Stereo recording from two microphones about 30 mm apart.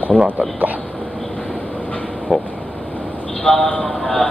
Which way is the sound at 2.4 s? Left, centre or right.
Right.